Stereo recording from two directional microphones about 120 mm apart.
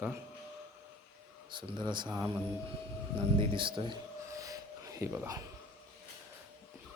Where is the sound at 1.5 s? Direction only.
40° right (ahead or behind).